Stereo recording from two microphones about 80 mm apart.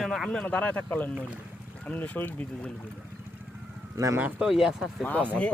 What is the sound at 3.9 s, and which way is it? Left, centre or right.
Speech, right.